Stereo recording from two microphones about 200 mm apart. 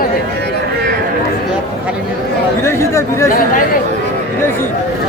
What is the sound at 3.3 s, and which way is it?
Speech, 45° left (ahead or behind).